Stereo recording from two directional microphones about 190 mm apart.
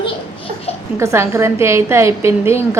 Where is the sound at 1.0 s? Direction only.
15° right (ahead or behind).